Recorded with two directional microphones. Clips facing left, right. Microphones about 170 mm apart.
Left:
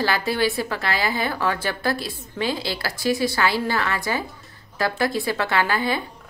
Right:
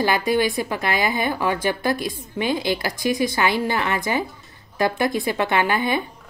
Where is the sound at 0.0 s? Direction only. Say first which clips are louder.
Right 2 dB; 15° right (ahead or behind).